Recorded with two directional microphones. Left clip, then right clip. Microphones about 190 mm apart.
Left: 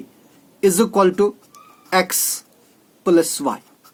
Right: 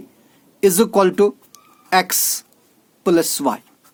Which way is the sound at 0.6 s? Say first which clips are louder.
Right 1 dB; 55° right (ahead or behind).